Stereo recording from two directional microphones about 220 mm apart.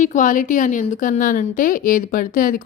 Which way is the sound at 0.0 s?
35° left (ahead or behind).